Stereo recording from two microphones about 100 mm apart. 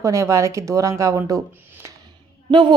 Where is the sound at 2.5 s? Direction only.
50° right (ahead or behind).